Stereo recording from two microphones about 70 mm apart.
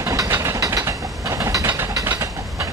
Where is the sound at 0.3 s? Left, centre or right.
Right.